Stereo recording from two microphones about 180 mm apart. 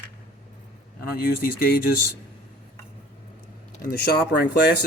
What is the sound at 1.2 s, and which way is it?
Speech, 55° left (ahead or behind).